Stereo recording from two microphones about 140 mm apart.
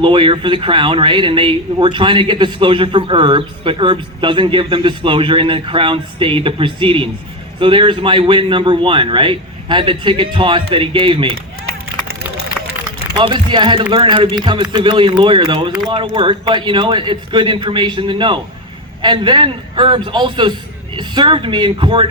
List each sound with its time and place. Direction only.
0.0 s a man's voice: 35° right (ahead or behind)
13.1 s a man's voice: 35° right (ahead or behind)